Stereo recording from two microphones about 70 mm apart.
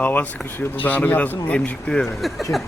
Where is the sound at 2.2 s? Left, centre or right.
Centre.